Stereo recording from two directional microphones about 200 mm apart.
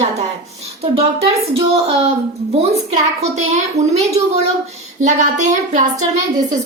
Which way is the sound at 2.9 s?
35° right (ahead or behind).